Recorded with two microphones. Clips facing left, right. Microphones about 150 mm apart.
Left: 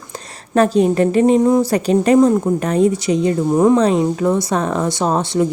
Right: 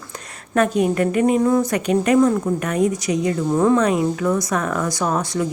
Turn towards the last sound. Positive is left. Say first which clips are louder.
# left 5 dB
turn(degrees=25)  # may be behind; listen again after turning